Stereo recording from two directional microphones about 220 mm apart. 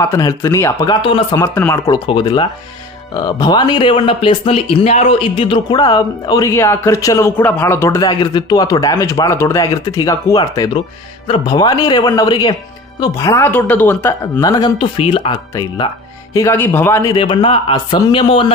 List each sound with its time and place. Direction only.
0.0 s a man's voice: 15° left (ahead or behind)
16.3 s a man's voice: 10° left (ahead or behind)